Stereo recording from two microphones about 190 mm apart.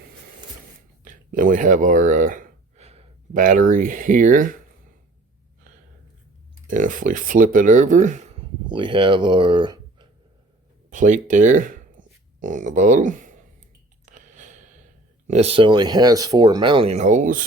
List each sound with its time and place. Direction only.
1.0 s speech: 45° right (ahead or behind)
6.7 s speech: 45° right (ahead or behind)
8.6 s speech: 25° right (ahead or behind)
10.8 s speech: 40° right (ahead or behind)
14.0 s a sound: 40° right (ahead or behind)
15.3 s speech: 35° right (ahead or behind)